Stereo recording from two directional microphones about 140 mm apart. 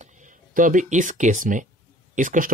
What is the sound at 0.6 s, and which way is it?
Speech, 70° right (ahead or behind).